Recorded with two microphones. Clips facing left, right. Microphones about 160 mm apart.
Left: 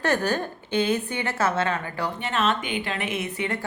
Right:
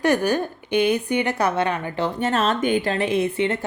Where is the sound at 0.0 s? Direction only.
10° right (ahead or behind).